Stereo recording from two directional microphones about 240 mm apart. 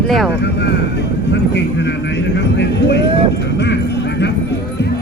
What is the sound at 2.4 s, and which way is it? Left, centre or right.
Vehicle, left.